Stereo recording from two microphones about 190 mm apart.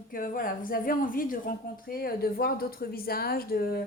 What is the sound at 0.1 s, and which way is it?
A woman's voice, 45° left (ahead or behind).